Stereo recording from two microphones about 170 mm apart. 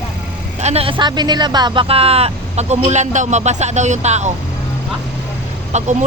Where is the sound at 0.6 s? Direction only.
35° right (ahead or behind).